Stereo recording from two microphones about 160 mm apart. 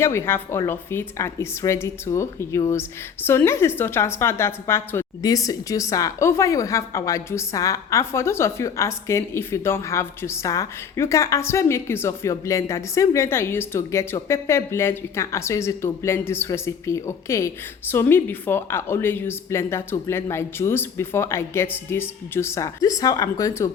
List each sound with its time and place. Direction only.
0.0 s a woman's voice: 15° left (ahead or behind)